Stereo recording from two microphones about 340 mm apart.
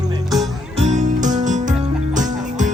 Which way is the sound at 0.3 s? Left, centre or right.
Centre.